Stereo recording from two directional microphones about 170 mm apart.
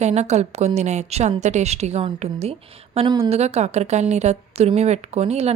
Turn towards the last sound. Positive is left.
turn(degrees=-40)  # may be behind; listen again after turning